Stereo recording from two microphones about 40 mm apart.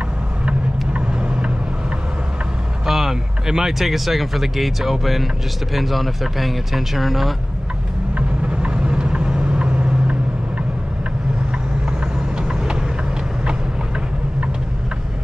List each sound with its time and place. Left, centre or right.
0.5 s vehicle: right
2.9 s speech: centre
8.1 s vehicle: right
12.4 s vehicle: centre